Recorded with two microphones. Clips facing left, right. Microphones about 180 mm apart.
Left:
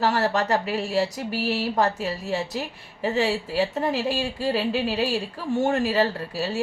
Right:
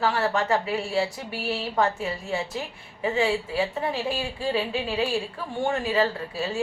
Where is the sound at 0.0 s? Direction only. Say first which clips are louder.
Left 2 dB; 40° left (ahead or behind).